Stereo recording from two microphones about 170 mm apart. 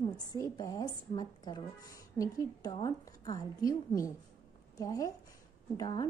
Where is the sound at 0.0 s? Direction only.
20° left (ahead or behind).